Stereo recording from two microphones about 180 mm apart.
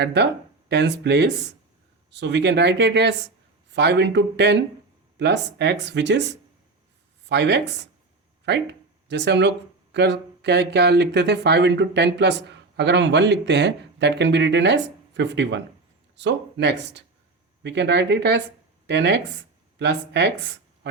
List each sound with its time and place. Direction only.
0.0 s speech: 70° right (ahead or behind)